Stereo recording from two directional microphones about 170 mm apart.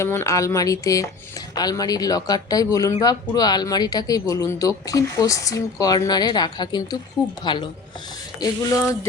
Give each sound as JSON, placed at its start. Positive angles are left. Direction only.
{"t": 0.0, "sound": "speech", "side_deg": 15}